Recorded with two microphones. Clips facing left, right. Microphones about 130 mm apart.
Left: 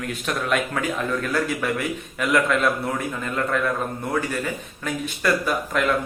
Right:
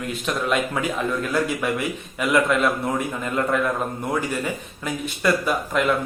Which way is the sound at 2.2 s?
20° right (ahead or behind).